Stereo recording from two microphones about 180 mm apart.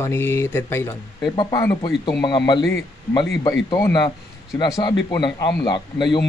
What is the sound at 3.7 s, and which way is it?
A man's voice, 25° left (ahead or behind).